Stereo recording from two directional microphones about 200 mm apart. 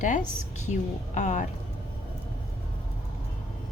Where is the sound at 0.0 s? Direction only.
40° left (ahead or behind).